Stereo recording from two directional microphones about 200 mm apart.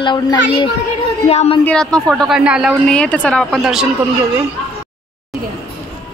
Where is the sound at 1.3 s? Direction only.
30° left (ahead or behind).